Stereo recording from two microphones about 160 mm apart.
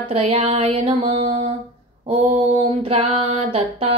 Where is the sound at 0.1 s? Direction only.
40° right (ahead or behind).